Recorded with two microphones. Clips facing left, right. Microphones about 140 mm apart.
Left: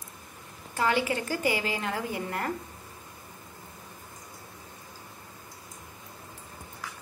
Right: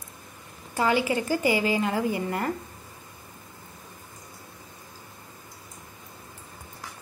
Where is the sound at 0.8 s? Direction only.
5° right (ahead or behind).